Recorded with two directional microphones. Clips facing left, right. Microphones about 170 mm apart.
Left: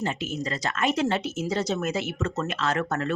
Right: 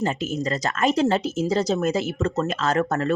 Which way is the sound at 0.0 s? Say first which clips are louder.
Right 5 dB; 40° right (ahead or behind).